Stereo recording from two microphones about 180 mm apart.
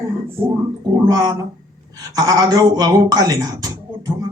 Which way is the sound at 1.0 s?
20° right (ahead or behind).